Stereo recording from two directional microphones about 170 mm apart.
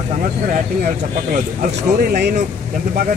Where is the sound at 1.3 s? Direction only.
50° right (ahead or behind).